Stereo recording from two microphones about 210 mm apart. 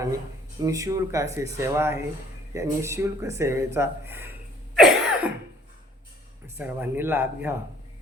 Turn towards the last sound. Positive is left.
turn(degrees=-10)  # may be behind; listen again after turning